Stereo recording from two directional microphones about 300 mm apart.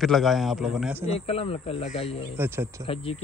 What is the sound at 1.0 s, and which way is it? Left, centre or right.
Speech, centre.